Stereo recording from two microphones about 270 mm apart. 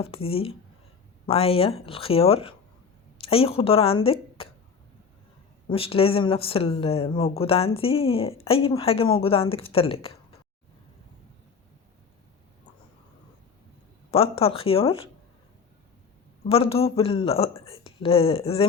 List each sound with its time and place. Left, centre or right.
0.0 s a woman's voice: left
5.6 s speech: left
14.1 s speech: left
16.5 s speech: left